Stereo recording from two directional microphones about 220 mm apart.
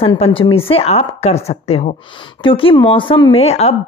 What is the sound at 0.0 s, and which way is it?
Speech, 25° left (ahead or behind).